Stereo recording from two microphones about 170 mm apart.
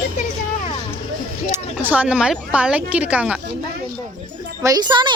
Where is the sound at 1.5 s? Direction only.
10° right (ahead or behind).